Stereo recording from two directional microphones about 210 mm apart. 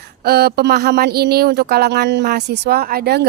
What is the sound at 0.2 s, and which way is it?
Speech, 50° right (ahead or behind).